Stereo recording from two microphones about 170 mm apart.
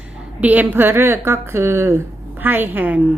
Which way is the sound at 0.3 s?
10° right (ahead or behind).